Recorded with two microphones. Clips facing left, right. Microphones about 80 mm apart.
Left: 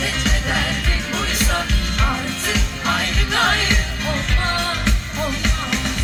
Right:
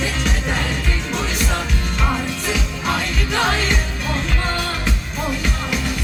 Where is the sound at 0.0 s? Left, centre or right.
Left.